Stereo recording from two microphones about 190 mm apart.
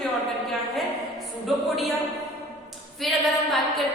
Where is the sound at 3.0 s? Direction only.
Centre (ahead or behind).